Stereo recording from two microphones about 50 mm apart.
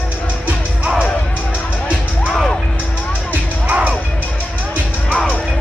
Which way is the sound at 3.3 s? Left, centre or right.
Right.